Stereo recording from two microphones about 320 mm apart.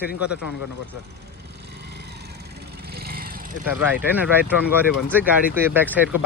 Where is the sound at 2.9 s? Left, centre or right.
Right.